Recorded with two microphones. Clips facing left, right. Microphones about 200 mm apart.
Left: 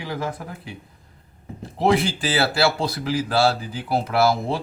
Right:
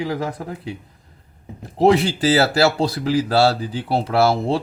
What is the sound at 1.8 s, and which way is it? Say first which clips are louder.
Speech: right 5 dB; 40° right (ahead or behind).